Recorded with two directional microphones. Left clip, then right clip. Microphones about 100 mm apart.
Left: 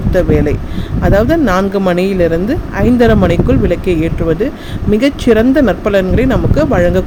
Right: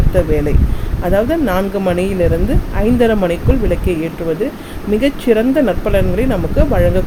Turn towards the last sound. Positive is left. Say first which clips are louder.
# left 3 dB
turn(degrees=30)  # may be behind; listen again after turning